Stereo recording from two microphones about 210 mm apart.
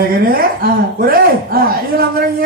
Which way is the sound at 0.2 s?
45° right (ahead or behind).